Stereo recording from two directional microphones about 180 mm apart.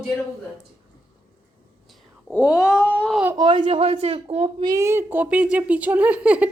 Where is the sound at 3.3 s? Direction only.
25° right (ahead or behind).